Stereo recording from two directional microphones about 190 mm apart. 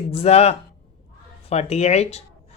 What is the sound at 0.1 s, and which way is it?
Speech, 30° left (ahead or behind).